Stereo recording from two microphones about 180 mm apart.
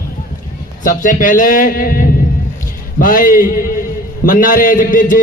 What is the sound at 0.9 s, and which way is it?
A man's voice, 45° left (ahead or behind).